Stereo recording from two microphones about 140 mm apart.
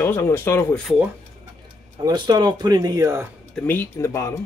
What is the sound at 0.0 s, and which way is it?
Speech, 15° left (ahead or behind).